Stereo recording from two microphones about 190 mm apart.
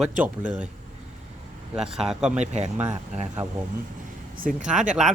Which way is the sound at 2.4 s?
40° right (ahead or behind).